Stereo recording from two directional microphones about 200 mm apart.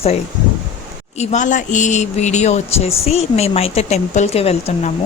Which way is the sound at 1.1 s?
35° left (ahead or behind).